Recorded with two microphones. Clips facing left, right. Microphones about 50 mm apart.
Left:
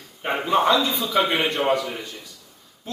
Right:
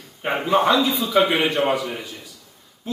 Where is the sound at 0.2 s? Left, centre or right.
Centre.